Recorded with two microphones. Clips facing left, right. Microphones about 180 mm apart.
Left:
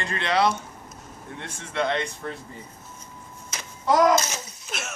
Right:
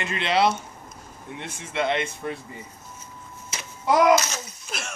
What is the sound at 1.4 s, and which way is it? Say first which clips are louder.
Speech: even; 15° right (ahead or behind).